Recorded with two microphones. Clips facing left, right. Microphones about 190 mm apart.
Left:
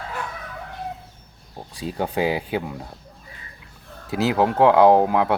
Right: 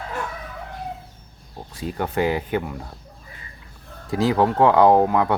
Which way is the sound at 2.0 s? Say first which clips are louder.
Even; 10° left (ahead or behind).